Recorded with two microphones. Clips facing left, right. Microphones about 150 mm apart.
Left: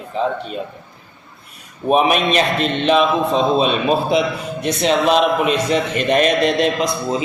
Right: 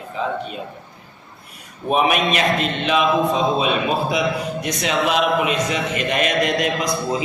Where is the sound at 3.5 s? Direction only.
25° left (ahead or behind).